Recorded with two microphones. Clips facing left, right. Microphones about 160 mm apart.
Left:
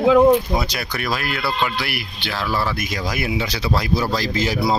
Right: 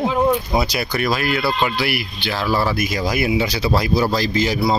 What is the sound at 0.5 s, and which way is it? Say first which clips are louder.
Speech: right 4 dB; 5° right (ahead or behind).